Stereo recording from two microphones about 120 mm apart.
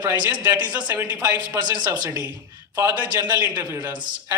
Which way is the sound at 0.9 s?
20° right (ahead or behind).